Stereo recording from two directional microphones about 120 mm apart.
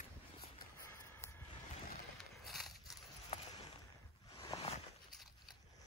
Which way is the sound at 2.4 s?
Centre (ahead or behind).